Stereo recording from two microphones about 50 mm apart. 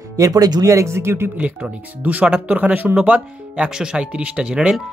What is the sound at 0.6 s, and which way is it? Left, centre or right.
Speech, right.